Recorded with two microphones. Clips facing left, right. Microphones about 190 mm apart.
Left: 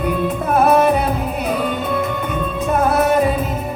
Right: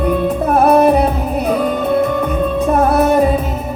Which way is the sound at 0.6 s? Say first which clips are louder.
Right 4 dB; 35° right (ahead or behind).